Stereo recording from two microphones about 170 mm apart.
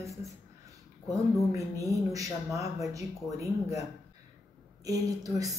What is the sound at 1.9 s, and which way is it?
Speech, 20° right (ahead or behind).